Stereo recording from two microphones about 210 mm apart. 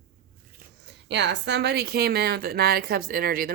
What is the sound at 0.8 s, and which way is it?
Speech, 55° right (ahead or behind).